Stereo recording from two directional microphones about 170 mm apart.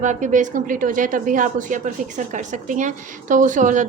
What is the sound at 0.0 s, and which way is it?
A woman's voice, 50° right (ahead or behind).